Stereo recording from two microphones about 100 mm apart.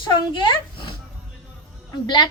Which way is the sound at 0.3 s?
50° left (ahead or behind).